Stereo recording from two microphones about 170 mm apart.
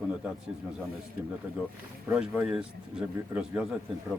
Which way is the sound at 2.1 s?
10° right (ahead or behind).